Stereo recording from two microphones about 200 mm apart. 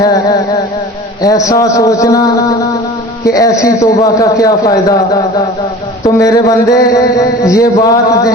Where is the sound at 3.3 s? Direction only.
15° left (ahead or behind).